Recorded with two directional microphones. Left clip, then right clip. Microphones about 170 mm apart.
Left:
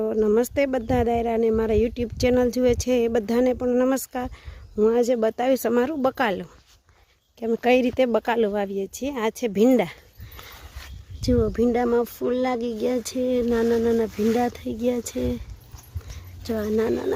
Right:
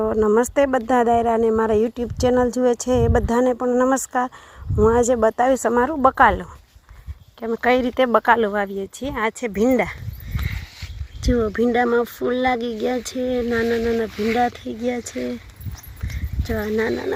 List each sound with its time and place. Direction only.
0.0 s speech: 5° left (ahead or behind)
7.3 s speech: 35° left (ahead or behind)
7.9 s speech: 20° left (ahead or behind)
11.2 s speech: 10° left (ahead or behind); by 15.4 s 25° left (ahead or behind)
16.4 s speech: 15° left (ahead or behind)